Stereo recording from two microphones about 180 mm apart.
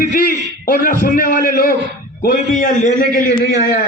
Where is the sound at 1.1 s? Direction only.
50° left (ahead or behind).